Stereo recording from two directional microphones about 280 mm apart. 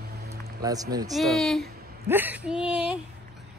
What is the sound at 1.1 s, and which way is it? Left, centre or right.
Speech, centre.